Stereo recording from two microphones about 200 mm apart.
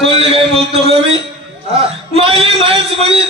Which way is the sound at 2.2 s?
30° right (ahead or behind).